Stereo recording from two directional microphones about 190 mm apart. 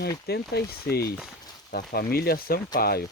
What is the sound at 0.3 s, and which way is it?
Speech, 55° left (ahead or behind).